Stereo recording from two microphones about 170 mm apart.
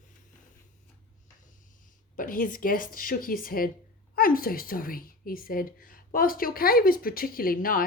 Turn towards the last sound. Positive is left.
turn(degrees=55)  # may be behind; listen again after turning